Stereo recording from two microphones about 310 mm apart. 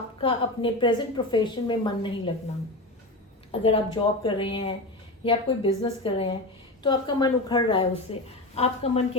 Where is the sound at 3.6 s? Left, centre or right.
Centre.